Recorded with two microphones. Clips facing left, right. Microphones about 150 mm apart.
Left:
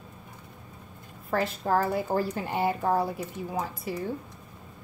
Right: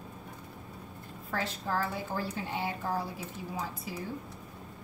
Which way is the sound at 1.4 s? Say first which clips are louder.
Left 7 dB; 60° left (ahead or behind).